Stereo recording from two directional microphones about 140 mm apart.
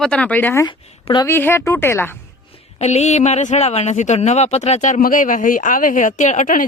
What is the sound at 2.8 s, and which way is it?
Speech, 55° left (ahead or behind).